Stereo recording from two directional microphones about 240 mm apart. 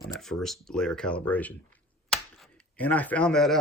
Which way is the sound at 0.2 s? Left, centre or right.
Centre.